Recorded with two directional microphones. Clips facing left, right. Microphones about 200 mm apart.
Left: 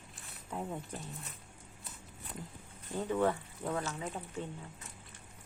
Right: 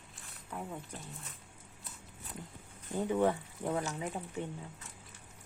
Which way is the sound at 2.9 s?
15° right (ahead or behind).